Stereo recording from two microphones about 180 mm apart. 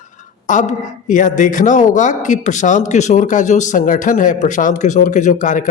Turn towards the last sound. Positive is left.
turn(degrees=45)  # may be behind; listen again after turning